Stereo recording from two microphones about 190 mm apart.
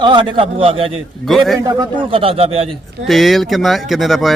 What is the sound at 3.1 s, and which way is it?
Speech, centre (ahead or behind).